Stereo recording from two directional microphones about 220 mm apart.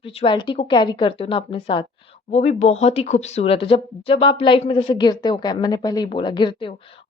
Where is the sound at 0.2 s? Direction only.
20° left (ahead or behind).